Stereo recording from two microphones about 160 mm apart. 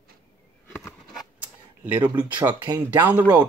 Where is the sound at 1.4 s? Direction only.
10° right (ahead or behind).